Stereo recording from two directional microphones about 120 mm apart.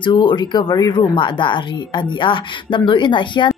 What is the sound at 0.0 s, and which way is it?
Speech, 40° left (ahead or behind).